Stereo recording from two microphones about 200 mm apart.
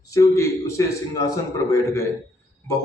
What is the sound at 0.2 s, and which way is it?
Speech, 15° left (ahead or behind).